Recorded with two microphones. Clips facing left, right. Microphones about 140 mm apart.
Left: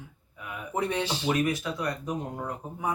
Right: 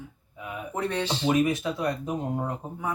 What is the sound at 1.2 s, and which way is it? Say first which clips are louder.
Speech: right 5 dB; 20° right (ahead or behind).